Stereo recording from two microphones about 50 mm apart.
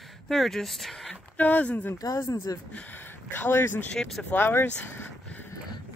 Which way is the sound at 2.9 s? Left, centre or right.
Left.